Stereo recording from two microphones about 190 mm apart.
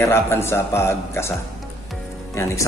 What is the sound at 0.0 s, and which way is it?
A man's voice, 15° left (ahead or behind).